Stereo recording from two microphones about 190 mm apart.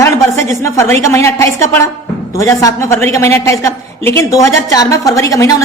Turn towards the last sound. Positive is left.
turn(degrees=15)  # may be behind; listen again after turning